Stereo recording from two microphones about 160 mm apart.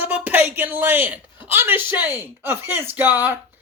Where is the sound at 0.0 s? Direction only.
10° right (ahead or behind).